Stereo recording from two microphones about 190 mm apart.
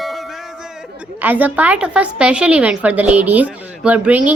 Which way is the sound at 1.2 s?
10° right (ahead or behind).